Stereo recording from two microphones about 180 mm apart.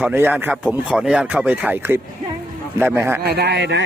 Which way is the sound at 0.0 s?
10° right (ahead or behind).